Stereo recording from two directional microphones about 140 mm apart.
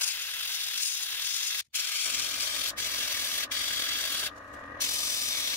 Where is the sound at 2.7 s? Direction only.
15° left (ahead or behind).